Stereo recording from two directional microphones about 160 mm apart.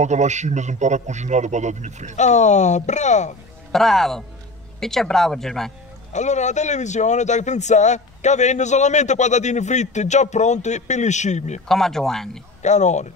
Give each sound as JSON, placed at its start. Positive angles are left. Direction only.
{"t": 0.0, "sound": "a man's voice", "side_deg": -45}
{"t": 2.1, "sound": "a man's voice", "side_deg": 45}
{"t": 3.7, "sound": "speech", "side_deg": 0}
{"t": 6.1, "sound": "a man's voice", "side_deg": 45}
{"t": 11.6, "sound": "speech", "side_deg": 5}
{"t": 12.6, "sound": "a man's voice", "side_deg": 45}